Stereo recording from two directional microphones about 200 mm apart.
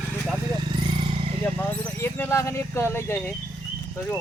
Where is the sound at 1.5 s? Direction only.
10° left (ahead or behind).